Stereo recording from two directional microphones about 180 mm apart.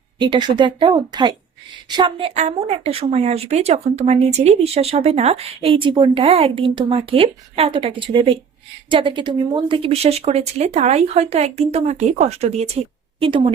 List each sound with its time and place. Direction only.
0.2 s speech: 25° right (ahead or behind)
2.3 s speech: 40° right (ahead or behind)